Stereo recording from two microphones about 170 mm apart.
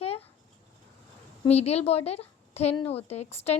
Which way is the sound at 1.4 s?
40° left (ahead or behind).